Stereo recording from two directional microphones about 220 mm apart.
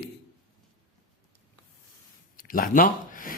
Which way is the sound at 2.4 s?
40° left (ahead or behind).